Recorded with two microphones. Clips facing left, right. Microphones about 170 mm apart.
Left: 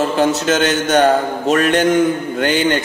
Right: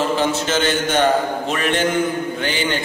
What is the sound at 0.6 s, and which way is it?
Speech, 45° left (ahead or behind).